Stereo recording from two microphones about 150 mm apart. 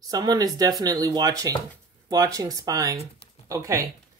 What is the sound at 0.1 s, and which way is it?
Speech, 25° right (ahead or behind).